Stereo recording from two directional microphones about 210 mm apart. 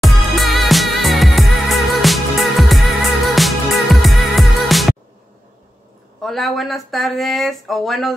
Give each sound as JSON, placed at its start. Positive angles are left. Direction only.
{"t": 0.0, "sound": "music", "side_deg": 0}
{"t": 6.2, "sound": "speech", "side_deg": 0}